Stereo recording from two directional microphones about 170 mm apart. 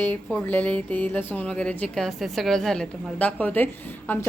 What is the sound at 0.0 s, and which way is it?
A woman's voice, 5° left (ahead or behind).